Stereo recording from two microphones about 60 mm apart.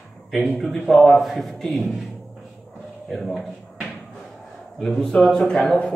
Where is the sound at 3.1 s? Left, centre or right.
Centre.